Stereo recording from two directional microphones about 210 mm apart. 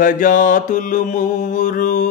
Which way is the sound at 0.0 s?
40° left (ahead or behind).